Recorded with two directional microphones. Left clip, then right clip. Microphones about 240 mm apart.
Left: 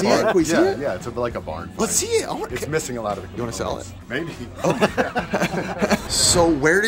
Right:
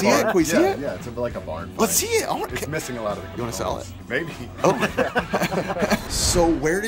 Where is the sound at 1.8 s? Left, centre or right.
Centre.